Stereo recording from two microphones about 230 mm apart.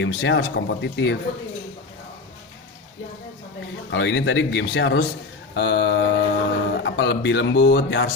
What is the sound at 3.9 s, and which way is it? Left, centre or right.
Speech, left.